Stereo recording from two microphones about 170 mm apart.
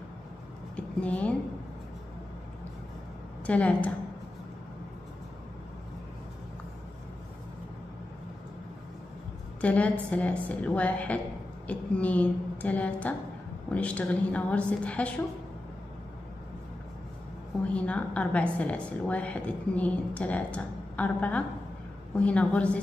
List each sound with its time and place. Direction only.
0.7 s a woman's voice: 5° left (ahead or behind)
3.4 s a woman's voice: 5° left (ahead or behind)
9.6 s a woman's voice: 5° left (ahead or behind)
17.6 s a woman's voice: 5° left (ahead or behind)